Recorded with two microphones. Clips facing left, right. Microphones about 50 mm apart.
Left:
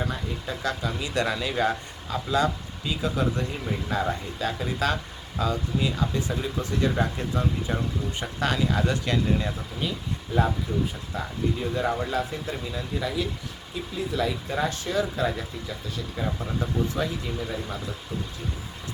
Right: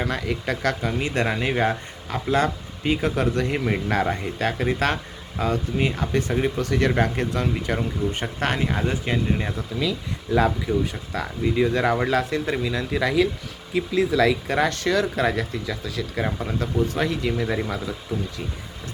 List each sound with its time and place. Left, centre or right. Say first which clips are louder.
0.0 s speech: right 5 dB; right
4.0 s speech: right 4 dB; right
7.8 s speech: right 5 dB; right
8.8 s speech: right 1 dB; right
10.3 s speech: right 5 dB; right
14.4 s speech: right 6 dB; right
15.0 s speech: right 5 dB; right
16.6 s speech: right 4 dB; right
17.5 s speech: right 7 dB; right